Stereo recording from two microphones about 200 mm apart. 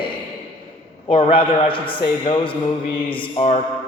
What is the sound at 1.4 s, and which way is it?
A man's voice, 25° left (ahead or behind).